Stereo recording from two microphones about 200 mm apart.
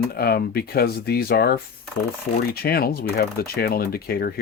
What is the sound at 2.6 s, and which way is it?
Speech, 50° left (ahead or behind).